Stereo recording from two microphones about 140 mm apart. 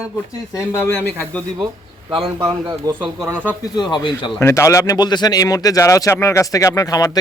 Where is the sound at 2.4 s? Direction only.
25° right (ahead or behind).